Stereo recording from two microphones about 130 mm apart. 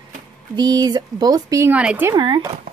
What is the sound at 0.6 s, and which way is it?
Speech, 30° right (ahead or behind).